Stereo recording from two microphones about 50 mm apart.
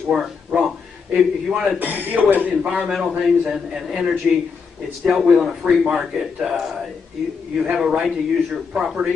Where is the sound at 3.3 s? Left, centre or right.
Centre.